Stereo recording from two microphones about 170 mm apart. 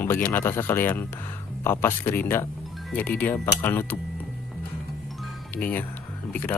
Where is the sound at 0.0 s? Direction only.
15° left (ahead or behind).